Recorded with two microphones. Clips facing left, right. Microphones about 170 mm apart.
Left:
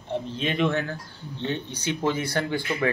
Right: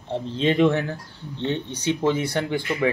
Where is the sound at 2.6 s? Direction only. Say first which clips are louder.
Right 2 dB; centre (ahead or behind).